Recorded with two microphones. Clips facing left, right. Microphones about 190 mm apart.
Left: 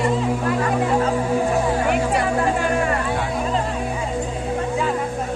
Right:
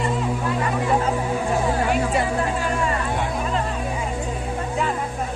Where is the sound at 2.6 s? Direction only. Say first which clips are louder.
Left 3 dB; 55° left (ahead or behind).